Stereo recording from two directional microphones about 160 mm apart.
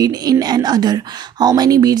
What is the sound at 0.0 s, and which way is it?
A woman's voice, 25° right (ahead or behind).